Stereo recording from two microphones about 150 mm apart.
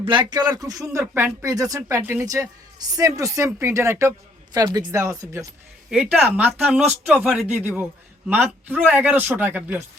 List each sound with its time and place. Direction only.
0.0 s speech: 35° right (ahead or behind)
5.9 s a woman's voice: 5° right (ahead or behind)